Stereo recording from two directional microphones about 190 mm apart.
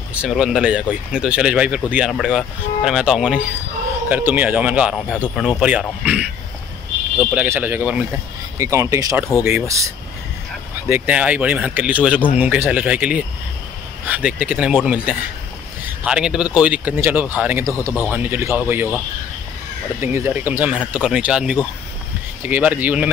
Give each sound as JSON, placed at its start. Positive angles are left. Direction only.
{"t": 0.1, "sound": "speech", "side_deg": -5}
{"t": 20.0, "sound": "speech", "side_deg": -10}